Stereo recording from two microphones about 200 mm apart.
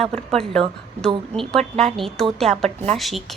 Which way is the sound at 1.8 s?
Centre (ahead or behind).